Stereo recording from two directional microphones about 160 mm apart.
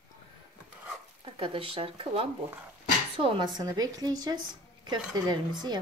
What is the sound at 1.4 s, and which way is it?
A woman's voice, 35° right (ahead or behind).